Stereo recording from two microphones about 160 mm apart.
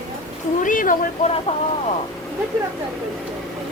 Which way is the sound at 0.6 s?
55° left (ahead or behind).